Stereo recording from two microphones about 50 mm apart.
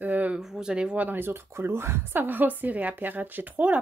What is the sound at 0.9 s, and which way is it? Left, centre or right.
Speech, right.